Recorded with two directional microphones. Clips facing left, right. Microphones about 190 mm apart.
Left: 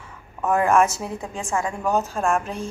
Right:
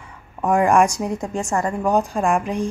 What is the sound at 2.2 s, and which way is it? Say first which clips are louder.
Speech: right 3 dB; 15° right (ahead or behind).